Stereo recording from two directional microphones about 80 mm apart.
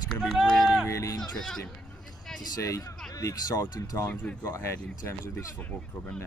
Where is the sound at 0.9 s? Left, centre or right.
Left.